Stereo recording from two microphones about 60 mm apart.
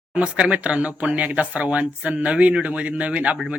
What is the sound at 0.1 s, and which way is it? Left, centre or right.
Speech, right.